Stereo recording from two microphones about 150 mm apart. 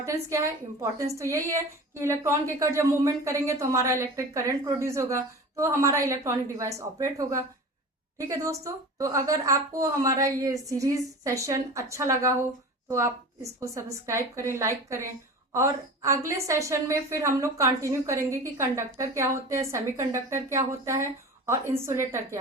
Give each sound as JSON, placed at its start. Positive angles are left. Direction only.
{"t": 0.0, "sound": "a woman's voice", "side_deg": -20}